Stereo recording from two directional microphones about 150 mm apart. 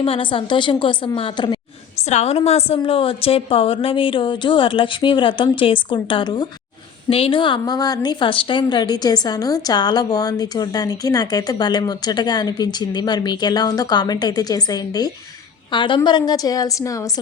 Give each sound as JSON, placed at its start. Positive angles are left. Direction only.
{"t": 0.0, "sound": "a woman's voice", "side_deg": 35}
{"t": 2.0, "sound": "a woman's voice", "side_deg": 45}